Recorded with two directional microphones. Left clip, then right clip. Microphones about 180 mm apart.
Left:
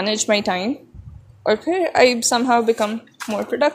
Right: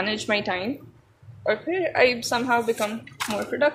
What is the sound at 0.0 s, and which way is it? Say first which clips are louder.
Speech: left 6 dB; 50° left (ahead or behind).